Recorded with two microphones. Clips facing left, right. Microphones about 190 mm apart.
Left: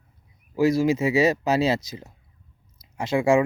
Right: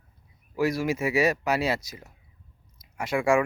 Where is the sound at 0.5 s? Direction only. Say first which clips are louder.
Left 6 dB; 25° left (ahead or behind).